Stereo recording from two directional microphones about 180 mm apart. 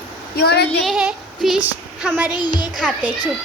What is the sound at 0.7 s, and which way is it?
A woman's voice, centre (ahead or behind).